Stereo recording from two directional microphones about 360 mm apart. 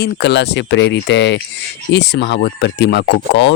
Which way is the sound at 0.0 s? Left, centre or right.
Left.